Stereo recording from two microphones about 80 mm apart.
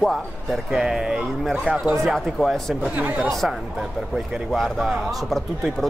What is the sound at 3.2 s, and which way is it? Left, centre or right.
Speech, centre.